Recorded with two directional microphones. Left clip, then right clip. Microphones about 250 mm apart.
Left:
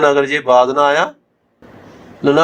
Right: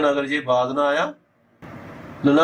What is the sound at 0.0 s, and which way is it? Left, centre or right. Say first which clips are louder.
Speech: left 8 dB; left.